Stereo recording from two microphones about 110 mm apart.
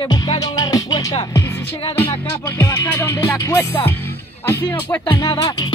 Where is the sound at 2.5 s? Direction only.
25° left (ahead or behind).